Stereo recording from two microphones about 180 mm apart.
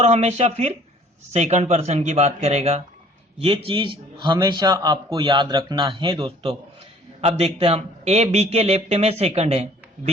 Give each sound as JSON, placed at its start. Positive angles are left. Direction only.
{"t": 0.0, "sound": "a man's voice", "side_deg": -40}